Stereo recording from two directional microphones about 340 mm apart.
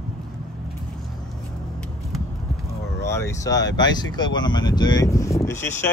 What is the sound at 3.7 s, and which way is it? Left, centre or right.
Speech, centre.